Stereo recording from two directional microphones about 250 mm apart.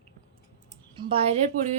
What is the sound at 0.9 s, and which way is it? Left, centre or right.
Speech, right.